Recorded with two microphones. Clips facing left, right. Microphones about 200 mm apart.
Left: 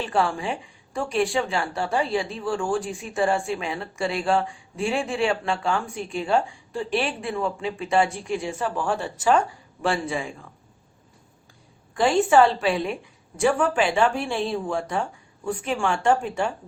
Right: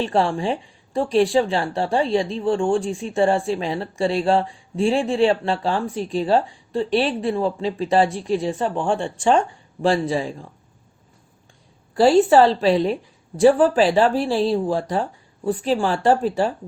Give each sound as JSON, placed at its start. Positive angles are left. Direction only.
{"t": 0.0, "sound": "speech", "side_deg": -30}
{"t": 11.9, "sound": "speech", "side_deg": -35}